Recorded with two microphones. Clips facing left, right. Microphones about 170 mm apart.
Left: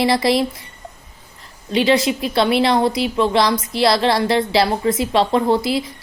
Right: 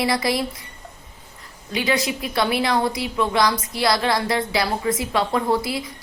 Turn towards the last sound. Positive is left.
turn(degrees=25)  # may be behind; listen again after turning